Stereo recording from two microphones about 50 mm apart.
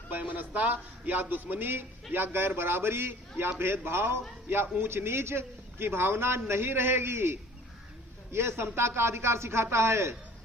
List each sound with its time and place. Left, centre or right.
0.1 s a man's voice: right